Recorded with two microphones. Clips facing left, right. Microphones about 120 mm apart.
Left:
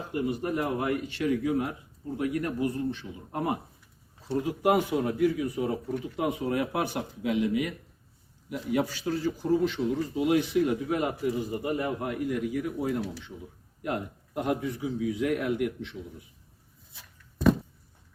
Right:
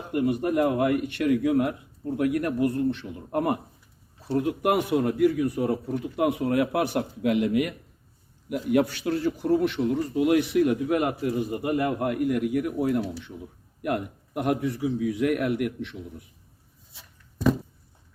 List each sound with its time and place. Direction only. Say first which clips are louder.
0.1 s a man's voice: right 6 dB; 60° right (ahead or behind)